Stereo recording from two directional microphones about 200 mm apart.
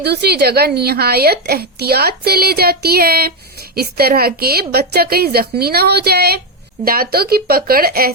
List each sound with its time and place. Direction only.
0.0 s a woman's voice: 55° right (ahead or behind)